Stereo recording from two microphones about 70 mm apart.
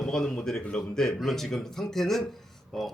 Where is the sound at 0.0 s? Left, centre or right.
Centre.